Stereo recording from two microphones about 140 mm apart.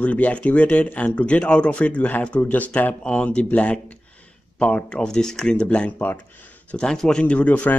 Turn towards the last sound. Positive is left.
turn(degrees=10)  # may be behind; listen again after turning